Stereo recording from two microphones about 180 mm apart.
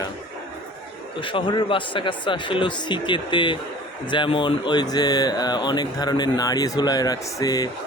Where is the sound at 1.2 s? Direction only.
30° left (ahead or behind).